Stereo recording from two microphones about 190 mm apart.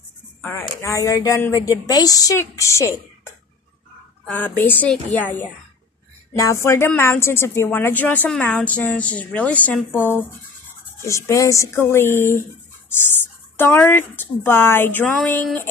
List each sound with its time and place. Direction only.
0.4 s speech: 10° left (ahead or behind)
4.3 s speech: 10° left (ahead or behind)
13.6 s speech: 10° left (ahead or behind)